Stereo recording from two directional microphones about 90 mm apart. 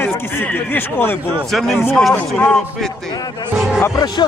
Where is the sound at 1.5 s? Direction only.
Centre (ahead or behind).